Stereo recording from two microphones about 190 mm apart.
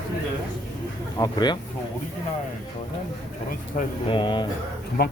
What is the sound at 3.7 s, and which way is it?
Speech, 45° left (ahead or behind).